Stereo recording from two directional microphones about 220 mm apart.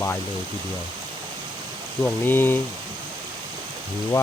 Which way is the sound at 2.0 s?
10° left (ahead or behind).